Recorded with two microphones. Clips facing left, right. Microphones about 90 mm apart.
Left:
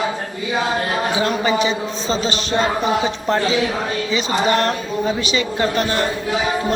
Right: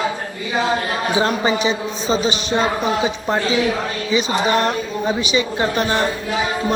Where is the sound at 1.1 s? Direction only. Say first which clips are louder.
Right 3 dB; 25° right (ahead or behind).